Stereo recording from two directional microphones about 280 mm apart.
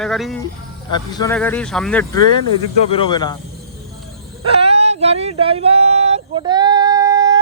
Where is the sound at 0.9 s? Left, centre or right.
Centre.